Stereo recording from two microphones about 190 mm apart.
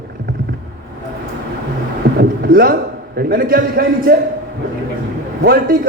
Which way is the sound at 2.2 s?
50° right (ahead or behind).